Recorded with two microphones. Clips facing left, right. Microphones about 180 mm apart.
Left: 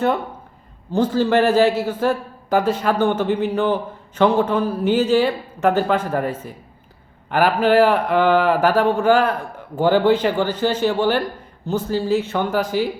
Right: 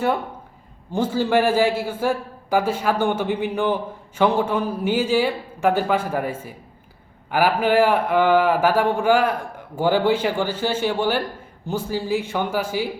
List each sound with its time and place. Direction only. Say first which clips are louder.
0.9 s a man's voice: left 3 dB; 10° right (ahead or behind)